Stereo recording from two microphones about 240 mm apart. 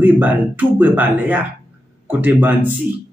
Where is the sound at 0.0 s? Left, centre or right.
Centre.